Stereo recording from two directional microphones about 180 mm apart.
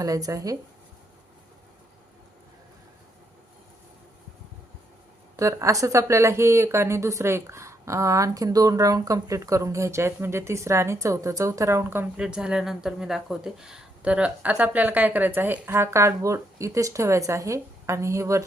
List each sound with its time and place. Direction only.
0.0 s speech: 20° right (ahead or behind)
5.4 s speech: 15° right (ahead or behind)